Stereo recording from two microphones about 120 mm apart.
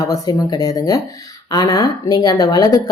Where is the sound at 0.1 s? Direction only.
30° left (ahead or behind).